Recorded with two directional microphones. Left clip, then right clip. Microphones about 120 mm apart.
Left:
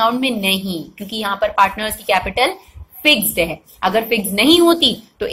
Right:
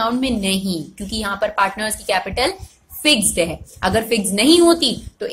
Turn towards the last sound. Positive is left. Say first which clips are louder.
# left 4 dB
turn(degrees=-25)  # may be behind; listen again after turning